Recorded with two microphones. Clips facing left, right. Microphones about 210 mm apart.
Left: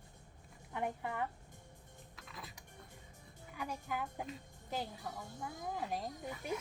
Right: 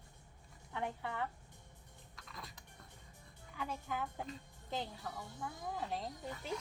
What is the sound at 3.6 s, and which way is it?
Speech, 10° left (ahead or behind).